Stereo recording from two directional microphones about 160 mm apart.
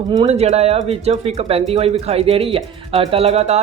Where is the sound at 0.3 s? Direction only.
40° right (ahead or behind).